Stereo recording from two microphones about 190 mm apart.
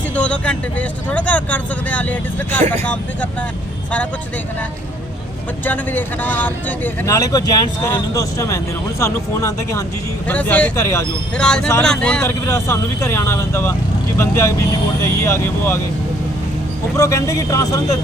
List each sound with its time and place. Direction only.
0.2 s speech: 5° left (ahead or behind)
5.6 s speech: 10° left (ahead or behind)
11.3 s speech: 5° left (ahead or behind)
17.0 s speech: 15° left (ahead or behind)